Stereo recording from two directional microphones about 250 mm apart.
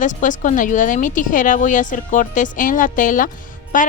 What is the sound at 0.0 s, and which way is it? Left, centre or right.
A woman's voice, left.